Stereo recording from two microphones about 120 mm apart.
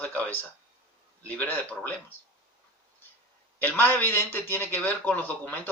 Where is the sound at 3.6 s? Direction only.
15° left (ahead or behind).